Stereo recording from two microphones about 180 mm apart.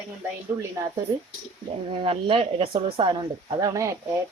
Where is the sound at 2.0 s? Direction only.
30° right (ahead or behind).